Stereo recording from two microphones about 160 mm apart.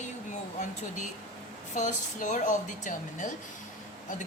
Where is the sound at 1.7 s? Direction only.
50° left (ahead or behind).